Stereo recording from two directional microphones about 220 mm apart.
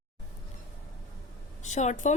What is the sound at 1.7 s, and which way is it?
Speech, 35° left (ahead or behind).